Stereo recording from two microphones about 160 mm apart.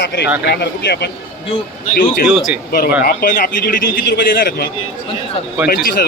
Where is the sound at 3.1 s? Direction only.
60° left (ahead or behind).